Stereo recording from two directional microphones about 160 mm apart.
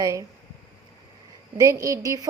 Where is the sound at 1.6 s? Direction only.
20° right (ahead or behind).